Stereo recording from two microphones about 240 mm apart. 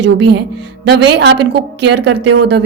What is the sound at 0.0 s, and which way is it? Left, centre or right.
A woman's voice, right.